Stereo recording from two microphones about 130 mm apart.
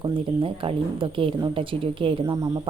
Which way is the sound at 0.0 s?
40° right (ahead or behind).